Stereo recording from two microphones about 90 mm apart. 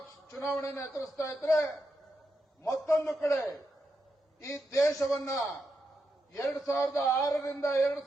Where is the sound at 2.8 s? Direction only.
30° left (ahead or behind).